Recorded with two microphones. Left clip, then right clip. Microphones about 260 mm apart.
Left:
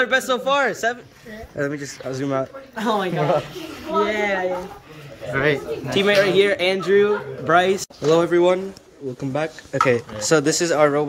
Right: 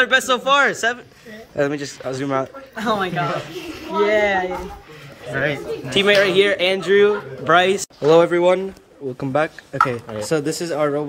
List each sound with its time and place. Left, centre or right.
0.0 s a man's voice: centre
4.0 s speech: right
5.3 s a man's voice: centre